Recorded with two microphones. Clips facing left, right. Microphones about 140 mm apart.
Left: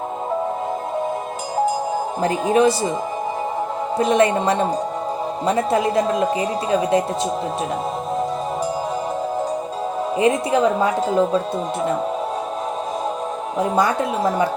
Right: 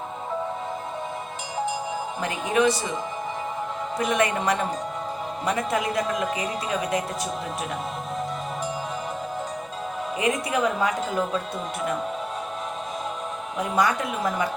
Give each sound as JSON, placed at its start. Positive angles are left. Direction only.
{"t": 2.2, "sound": "speech", "side_deg": 35}
{"t": 3.9, "sound": "a woman's voice", "side_deg": 30}
{"t": 10.2, "sound": "speech", "side_deg": 30}
{"t": 13.6, "sound": "speech", "side_deg": 30}